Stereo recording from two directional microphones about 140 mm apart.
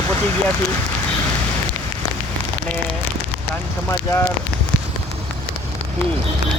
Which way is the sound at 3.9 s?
20° left (ahead or behind).